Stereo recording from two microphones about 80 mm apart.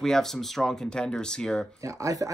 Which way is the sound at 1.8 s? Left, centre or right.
Right.